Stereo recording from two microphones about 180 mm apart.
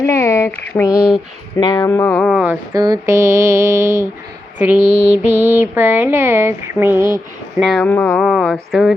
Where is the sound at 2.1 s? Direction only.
Centre (ahead or behind).